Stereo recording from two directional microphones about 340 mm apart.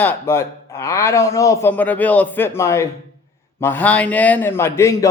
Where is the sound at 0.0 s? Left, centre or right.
Centre.